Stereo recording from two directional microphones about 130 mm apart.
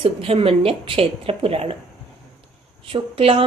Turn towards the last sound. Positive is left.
turn(degrees=-45)  # may be behind; listen again after turning